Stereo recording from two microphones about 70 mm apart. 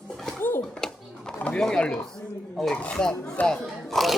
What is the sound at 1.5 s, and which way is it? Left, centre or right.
Speech, centre.